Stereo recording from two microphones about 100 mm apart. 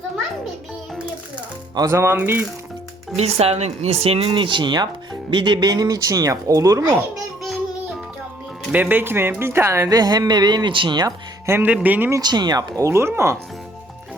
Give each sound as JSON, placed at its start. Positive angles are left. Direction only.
{"t": 1.7, "sound": "speech", "side_deg": -35}
{"t": 3.2, "sound": "speech", "side_deg": -90}
{"t": 4.3, "sound": "speech", "side_deg": -55}
{"t": 8.7, "sound": "speech", "side_deg": -15}
{"t": 9.9, "sound": "speech", "side_deg": -40}
{"t": 11.4, "sound": "speech", "side_deg": -25}
{"t": 12.2, "sound": "speech", "side_deg": -45}